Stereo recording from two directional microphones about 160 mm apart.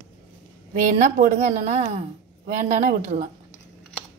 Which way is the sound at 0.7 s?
55° right (ahead or behind).